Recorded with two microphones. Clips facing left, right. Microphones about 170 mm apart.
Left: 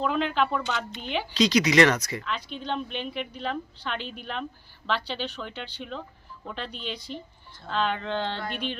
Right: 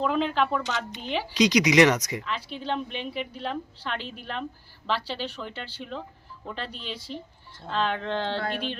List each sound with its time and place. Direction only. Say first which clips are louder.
0.0 s a woman's voice: right 1 dB; centre (ahead or behind)
1.3 s speech: right 1 dB; 15° right (ahead or behind)
2.2 s a woman's voice: right 1 dB; 5° right (ahead or behind)